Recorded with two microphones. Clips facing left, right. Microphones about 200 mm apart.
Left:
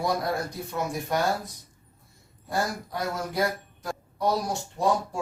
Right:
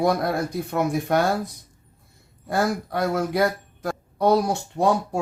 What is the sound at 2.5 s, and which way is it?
Speech, 60° right (ahead or behind).